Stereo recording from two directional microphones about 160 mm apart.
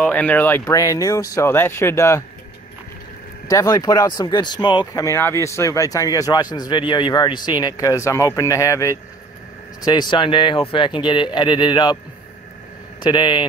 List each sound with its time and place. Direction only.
0.0 s speech: 10° left (ahead or behind)
3.4 s speech: 20° left (ahead or behind)
13.0 s speech: 30° left (ahead or behind)